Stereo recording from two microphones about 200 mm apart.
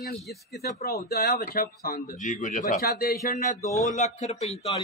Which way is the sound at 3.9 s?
35° left (ahead or behind).